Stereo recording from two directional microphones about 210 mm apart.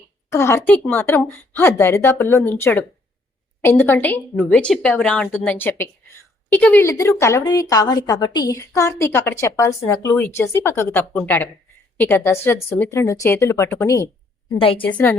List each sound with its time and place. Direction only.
0.3 s a woman's voice: 10° left (ahead or behind)
14.6 s a woman's voice: 25° left (ahead or behind)
14.8 s a woman's voice: 5° left (ahead or behind)